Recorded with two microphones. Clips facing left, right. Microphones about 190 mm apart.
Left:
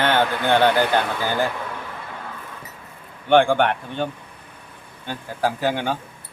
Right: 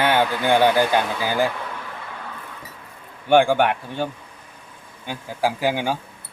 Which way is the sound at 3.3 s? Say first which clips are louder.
Even; 10° right (ahead or behind).